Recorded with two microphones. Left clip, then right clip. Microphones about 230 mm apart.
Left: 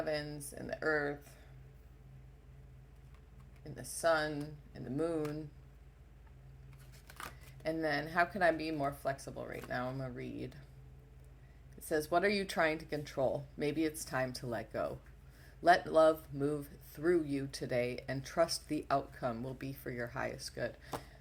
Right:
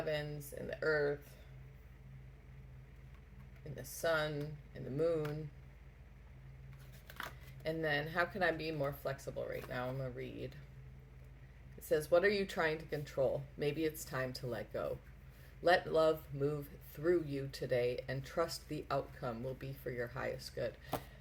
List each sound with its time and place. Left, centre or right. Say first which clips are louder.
0.0 s speech: left 2 dB; left
3.6 s speech: left 4 dB; left
7.6 s speech: left 1 dB; left
11.9 s speech: right 1 dB; left